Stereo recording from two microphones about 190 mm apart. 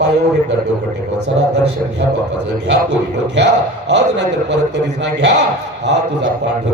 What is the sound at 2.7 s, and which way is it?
A man's voice, 65° right (ahead or behind).